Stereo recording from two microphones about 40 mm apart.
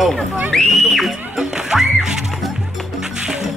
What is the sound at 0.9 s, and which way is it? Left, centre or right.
Speech, centre.